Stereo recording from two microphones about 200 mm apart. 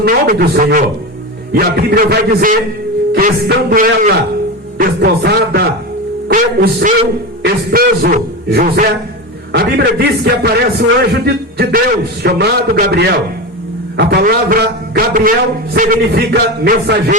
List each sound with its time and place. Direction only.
0.0 s a man's voice: 50° right (ahead or behind)
0.6 s speech: 40° right (ahead or behind)
1.5 s a man's voice: 50° right (ahead or behind)